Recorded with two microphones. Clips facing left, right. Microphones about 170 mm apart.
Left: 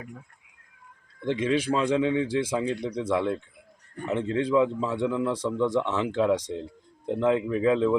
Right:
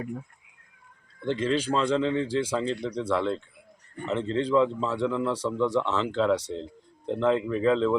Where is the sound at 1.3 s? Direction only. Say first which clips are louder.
Left 1 dB; 10° left (ahead or behind).